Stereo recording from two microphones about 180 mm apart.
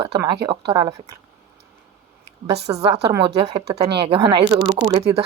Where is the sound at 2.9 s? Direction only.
20° right (ahead or behind).